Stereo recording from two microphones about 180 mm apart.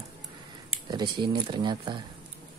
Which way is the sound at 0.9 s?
25° right (ahead or behind).